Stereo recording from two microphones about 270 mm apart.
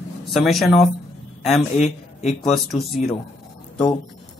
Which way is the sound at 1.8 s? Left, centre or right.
Left.